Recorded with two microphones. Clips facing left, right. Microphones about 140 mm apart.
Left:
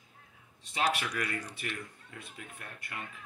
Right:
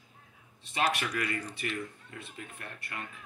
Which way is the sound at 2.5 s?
10° left (ahead or behind).